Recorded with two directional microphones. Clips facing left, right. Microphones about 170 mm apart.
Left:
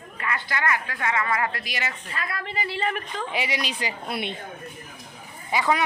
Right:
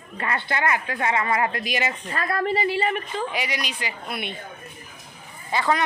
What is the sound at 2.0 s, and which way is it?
Speech, 45° right (ahead or behind).